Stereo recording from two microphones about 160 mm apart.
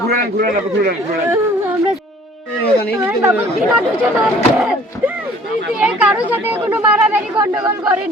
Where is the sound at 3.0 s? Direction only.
15° right (ahead or behind).